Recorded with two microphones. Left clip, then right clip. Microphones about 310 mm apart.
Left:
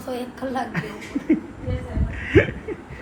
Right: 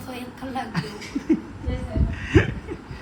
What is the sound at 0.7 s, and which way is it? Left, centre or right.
Speech, centre.